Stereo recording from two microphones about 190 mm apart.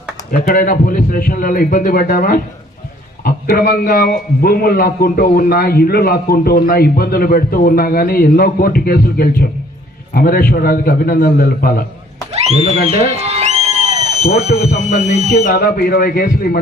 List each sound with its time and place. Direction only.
0.3 s a man's voice: 50° left (ahead or behind)
13.2 s music: 35° right (ahead or behind)
14.3 s speech: 60° left (ahead or behind)
14.8 s a man's voice: 50° left (ahead or behind)